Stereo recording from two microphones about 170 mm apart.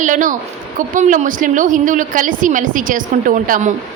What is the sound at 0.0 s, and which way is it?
A woman's voice, 50° right (ahead or behind).